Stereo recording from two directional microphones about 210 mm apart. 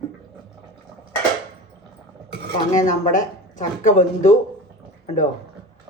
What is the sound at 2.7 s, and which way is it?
Speech, 35° left (ahead or behind).